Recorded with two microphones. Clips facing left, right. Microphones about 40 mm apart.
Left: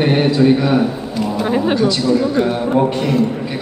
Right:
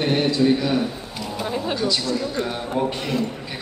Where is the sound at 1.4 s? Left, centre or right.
Left.